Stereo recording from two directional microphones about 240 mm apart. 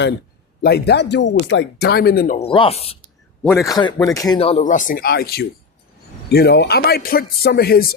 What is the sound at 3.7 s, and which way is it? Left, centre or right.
Speech, centre.